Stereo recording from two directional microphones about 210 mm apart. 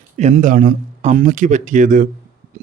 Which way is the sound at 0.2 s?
35° right (ahead or behind).